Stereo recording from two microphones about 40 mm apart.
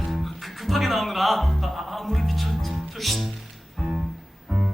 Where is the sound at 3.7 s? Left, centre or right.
Centre.